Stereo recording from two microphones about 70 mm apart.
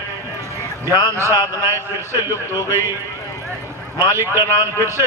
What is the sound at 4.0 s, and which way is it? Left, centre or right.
A man's voice, right.